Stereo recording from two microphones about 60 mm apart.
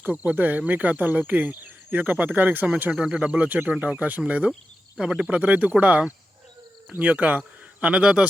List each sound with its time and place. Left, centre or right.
0.0 s speech: right
2.9 s speech: centre